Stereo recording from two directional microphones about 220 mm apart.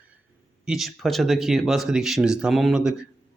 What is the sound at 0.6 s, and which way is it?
Speech, centre (ahead or behind).